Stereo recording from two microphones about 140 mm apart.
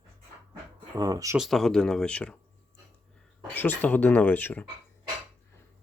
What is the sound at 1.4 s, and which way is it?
Speech, centre (ahead or behind).